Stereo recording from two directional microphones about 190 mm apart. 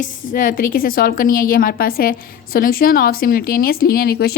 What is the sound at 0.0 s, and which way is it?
A woman's voice, 45° left (ahead or behind).